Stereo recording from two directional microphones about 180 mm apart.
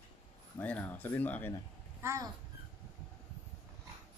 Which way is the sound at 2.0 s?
15° right (ahead or behind).